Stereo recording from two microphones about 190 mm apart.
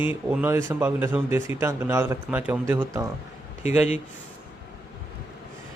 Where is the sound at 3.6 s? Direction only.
35° left (ahead or behind).